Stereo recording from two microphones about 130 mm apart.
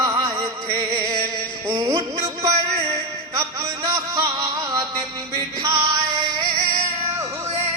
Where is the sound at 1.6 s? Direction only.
35° right (ahead or behind).